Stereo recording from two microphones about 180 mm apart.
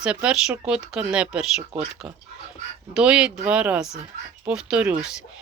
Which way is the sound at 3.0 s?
5° right (ahead or behind).